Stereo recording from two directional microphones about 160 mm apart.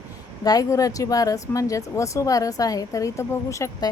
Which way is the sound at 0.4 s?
20° left (ahead or behind).